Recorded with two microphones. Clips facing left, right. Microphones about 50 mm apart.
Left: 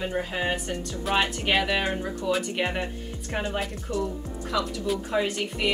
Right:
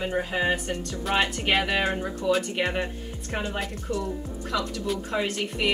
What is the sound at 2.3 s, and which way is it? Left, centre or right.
Speech, centre.